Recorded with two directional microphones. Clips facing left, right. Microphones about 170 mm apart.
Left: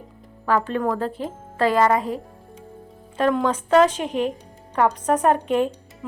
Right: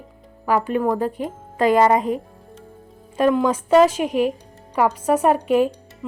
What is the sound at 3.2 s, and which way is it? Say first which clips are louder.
A woman's voice: right 3 dB; 10° right (ahead or behind).